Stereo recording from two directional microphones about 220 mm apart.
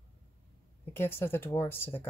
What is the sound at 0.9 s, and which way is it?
Speech, 10° left (ahead or behind).